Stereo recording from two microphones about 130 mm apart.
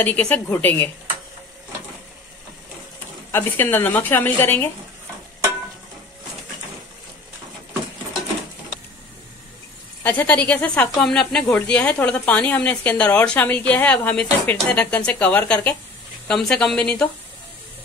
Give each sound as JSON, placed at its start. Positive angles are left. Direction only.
{"t": 0.0, "sound": "speech", "side_deg": 10}
{"t": 3.3, "sound": "speech", "side_deg": 15}
{"t": 10.0, "sound": "speech", "side_deg": 15}